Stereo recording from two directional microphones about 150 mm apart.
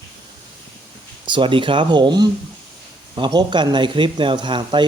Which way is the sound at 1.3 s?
35° right (ahead or behind).